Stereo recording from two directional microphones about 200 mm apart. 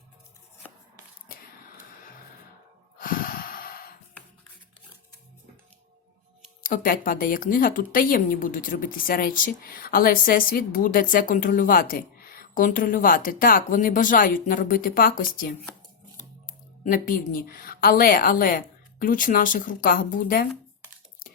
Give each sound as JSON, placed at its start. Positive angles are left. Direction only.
{"t": 3.0, "sound": "snort", "side_deg": 45}
{"t": 6.6, "sound": "a woman's voice", "side_deg": 45}
{"t": 16.8, "sound": "a woman's voice", "side_deg": 45}